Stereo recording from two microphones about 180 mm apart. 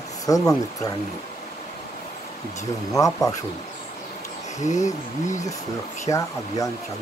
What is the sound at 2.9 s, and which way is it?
Speech, 20° left (ahead or behind).